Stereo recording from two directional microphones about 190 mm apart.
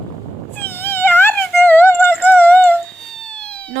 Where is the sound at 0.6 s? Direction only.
10° left (ahead or behind).